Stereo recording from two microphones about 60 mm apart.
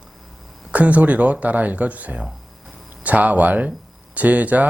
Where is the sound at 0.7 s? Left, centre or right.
Right.